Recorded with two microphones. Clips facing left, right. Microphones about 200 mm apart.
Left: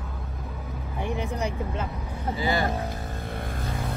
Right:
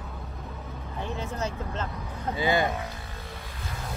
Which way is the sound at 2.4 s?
20° right (ahead or behind).